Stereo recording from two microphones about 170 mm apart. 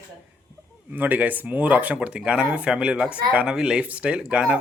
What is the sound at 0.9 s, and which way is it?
Speech, 10° right (ahead or behind).